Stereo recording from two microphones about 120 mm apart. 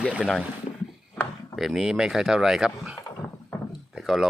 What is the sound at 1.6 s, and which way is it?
Speech, centre (ahead or behind).